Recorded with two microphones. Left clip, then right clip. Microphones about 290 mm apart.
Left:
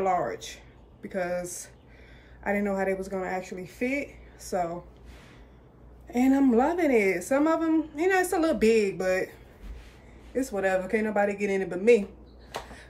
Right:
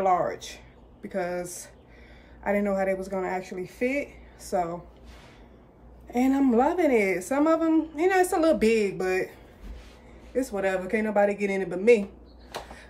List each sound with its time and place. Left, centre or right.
0.0 s a woman's voice: centre
6.0 s a woman's voice: centre
10.3 s a woman's voice: centre